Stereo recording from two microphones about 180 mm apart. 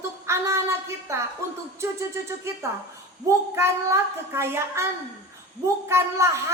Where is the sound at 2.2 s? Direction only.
15° right (ahead or behind).